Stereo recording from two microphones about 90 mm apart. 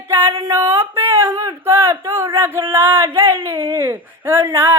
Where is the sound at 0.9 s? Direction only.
25° right (ahead or behind).